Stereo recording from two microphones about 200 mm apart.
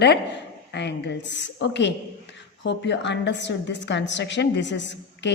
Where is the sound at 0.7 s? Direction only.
60° left (ahead or behind).